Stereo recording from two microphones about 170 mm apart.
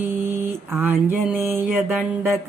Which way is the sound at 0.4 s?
10° right (ahead or behind).